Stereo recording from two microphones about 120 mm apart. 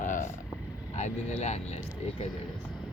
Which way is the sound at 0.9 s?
75° left (ahead or behind).